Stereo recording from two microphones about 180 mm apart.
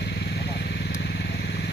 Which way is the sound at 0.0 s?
70° left (ahead or behind).